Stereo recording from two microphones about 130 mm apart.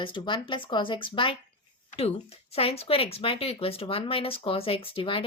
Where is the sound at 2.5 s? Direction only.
50° left (ahead or behind).